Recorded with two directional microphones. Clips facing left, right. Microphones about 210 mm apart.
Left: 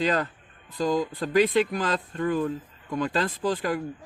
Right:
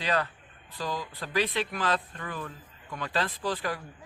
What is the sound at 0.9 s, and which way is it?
Speech, 45° left (ahead or behind).